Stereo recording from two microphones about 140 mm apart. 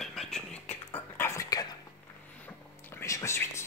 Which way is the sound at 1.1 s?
20° left (ahead or behind).